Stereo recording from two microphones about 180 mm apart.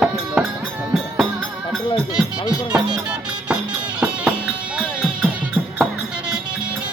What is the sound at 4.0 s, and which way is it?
Music, 5° right (ahead or behind).